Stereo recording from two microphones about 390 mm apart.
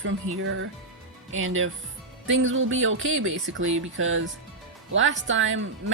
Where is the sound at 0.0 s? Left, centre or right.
Right.